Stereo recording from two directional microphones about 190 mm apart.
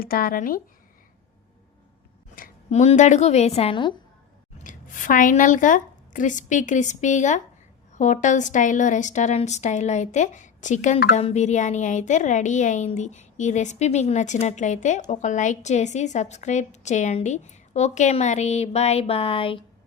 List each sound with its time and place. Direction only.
0.0 s speech: 50° left (ahead or behind)
2.3 s a woman's voice: 40° left (ahead or behind)
4.5 s a woman's voice: 45° left (ahead or behind)